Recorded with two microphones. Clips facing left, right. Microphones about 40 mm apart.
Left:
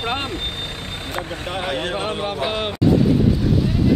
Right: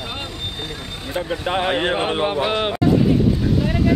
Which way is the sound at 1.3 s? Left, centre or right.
Right.